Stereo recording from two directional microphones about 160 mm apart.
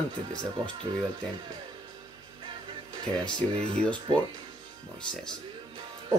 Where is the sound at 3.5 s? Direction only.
35° right (ahead or behind).